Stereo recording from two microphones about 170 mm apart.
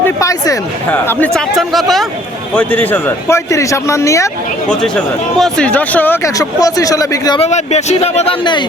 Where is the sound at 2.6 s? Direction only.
10° left (ahead or behind).